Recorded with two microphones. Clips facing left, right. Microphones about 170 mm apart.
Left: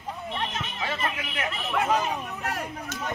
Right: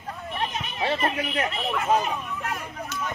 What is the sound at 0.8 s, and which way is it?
Speech, 35° right (ahead or behind).